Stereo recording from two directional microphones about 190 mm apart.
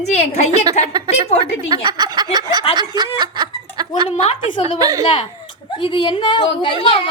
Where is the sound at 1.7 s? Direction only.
25° right (ahead or behind).